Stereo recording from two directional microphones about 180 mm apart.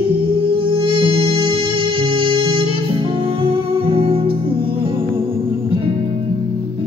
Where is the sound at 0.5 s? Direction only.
30° right (ahead or behind).